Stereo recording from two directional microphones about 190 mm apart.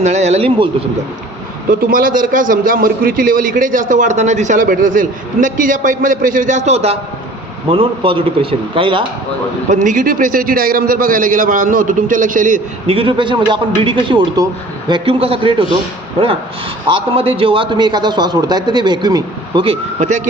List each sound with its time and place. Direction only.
0.0 s speech: 35° right (ahead or behind)
1.9 s a man's voice: 45° right (ahead or behind); by 9.0 s 25° right (ahead or behind)
9.6 s a man's voice: 40° right (ahead or behind)
12.9 s a man's voice: 25° right (ahead or behind)
16.9 s a man's voice: 30° right (ahead or behind)